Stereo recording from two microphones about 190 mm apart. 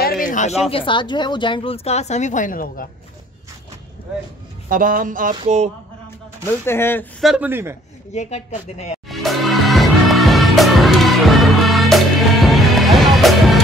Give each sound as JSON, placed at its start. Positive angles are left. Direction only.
{"t": 0.0, "sound": "a sound", "side_deg": 50}
{"t": 0.7, "sound": "a woman's voice", "side_deg": 25}
{"t": 4.6, "sound": "speech", "side_deg": -45}
{"t": 6.6, "sound": "speech", "side_deg": 10}
{"t": 7.2, "sound": "speech", "side_deg": -5}
{"t": 8.1, "sound": "speech", "side_deg": 35}
{"t": 9.1, "sound": "music", "side_deg": 0}